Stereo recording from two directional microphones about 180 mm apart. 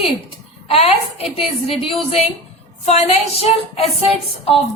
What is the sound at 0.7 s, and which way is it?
A woman's voice, 35° left (ahead or behind).